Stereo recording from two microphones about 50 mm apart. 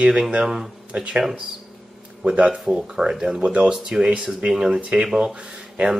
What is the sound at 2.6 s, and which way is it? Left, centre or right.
Speech, centre.